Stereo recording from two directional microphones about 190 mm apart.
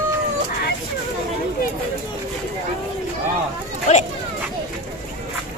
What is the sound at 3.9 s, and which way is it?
Speech, 40° left (ahead or behind).